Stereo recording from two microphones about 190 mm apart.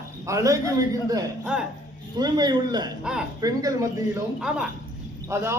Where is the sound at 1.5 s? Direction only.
5° right (ahead or behind).